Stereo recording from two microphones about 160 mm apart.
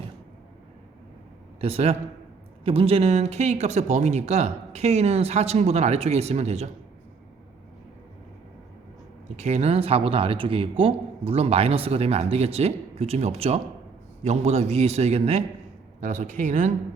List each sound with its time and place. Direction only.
1.6 s speech: 40° right (ahead or behind)
9.3 s speech: 45° right (ahead or behind)